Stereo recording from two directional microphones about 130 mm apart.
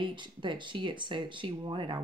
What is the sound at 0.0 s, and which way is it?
Speech, 40° right (ahead or behind).